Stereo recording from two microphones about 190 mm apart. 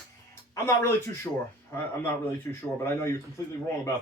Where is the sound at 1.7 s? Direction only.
10° left (ahead or behind).